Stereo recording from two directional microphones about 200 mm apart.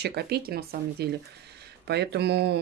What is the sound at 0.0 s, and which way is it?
Speech, 55° right (ahead or behind).